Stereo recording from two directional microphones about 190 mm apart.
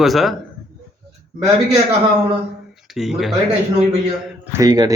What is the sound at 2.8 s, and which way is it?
Speech, centre (ahead or behind).